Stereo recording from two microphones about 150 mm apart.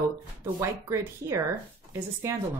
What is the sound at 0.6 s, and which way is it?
Speech, 20° right (ahead or behind).